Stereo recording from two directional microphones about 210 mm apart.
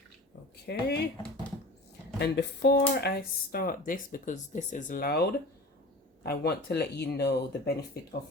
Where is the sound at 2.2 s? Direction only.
55° left (ahead or behind).